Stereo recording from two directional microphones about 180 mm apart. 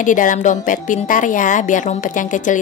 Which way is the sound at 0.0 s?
45° left (ahead or behind).